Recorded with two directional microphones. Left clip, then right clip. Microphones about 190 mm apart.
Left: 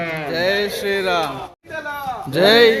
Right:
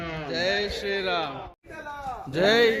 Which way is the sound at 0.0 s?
60° right (ahead or behind).